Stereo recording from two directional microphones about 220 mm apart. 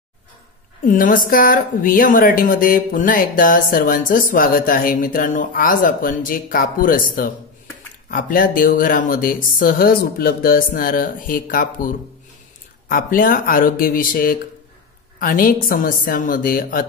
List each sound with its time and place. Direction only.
0.8 s speech: 40° left (ahead or behind)